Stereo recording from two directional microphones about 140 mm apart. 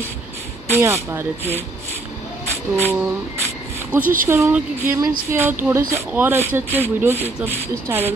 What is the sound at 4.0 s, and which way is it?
Speech, 75° right (ahead or behind).